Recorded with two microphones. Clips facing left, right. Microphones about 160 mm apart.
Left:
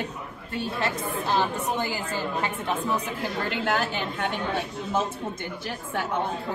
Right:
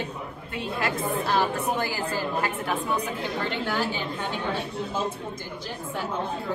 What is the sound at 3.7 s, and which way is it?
Speech, 55° left (ahead or behind).